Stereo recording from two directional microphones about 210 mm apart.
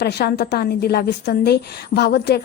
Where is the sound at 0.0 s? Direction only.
50° left (ahead or behind).